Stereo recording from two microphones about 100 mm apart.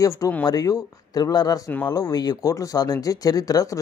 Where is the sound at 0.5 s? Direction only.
40° left (ahead or behind).